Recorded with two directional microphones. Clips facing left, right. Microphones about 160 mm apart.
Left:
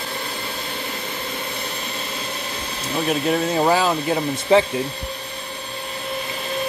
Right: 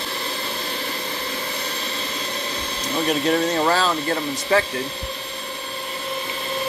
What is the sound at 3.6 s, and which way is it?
Speech, 15° left (ahead or behind).